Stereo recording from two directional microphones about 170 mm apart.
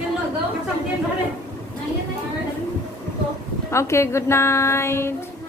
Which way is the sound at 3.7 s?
15° left (ahead or behind).